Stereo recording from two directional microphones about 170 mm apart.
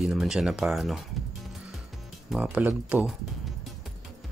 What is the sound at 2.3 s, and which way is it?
Speech, 10° right (ahead or behind).